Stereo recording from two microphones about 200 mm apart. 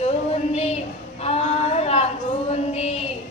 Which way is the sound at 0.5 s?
30° left (ahead or behind).